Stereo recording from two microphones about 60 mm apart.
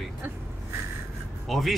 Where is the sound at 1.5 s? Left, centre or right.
Centre.